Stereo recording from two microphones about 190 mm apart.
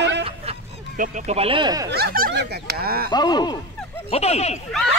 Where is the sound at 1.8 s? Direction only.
55° right (ahead or behind).